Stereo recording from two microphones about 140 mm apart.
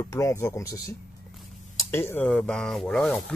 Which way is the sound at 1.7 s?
15° left (ahead or behind).